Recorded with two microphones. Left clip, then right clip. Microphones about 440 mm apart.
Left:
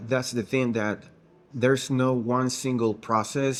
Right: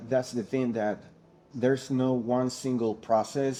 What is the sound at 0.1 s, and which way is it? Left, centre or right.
Speech, left.